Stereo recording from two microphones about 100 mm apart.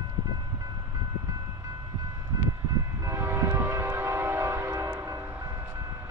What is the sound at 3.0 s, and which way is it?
Train, 25° right (ahead or behind).